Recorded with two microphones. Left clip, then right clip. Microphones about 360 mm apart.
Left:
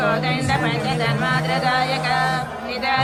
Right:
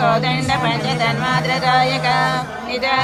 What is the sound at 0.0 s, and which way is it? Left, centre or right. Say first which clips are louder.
Music: right 4 dB; centre.